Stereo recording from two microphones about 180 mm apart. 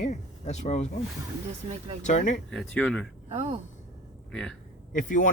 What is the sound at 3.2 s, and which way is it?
Speech, 35° right (ahead or behind).